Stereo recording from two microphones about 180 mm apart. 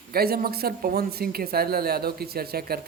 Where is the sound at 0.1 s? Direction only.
60° right (ahead or behind).